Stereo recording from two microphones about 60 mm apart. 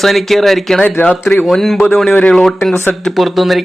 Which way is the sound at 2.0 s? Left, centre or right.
Left.